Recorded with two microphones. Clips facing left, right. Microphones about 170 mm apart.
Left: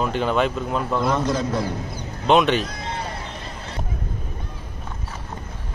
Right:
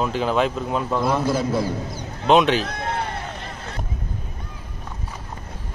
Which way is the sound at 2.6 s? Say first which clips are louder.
Right 3 dB; 60° right (ahead or behind).